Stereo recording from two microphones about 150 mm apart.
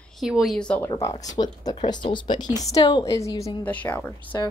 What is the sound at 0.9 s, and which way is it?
Speech, 25° left (ahead or behind).